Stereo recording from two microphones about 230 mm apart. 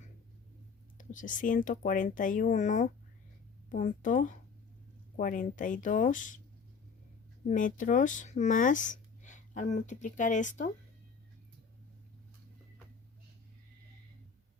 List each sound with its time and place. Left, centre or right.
0.9 s speech: left
7.4 s speech: left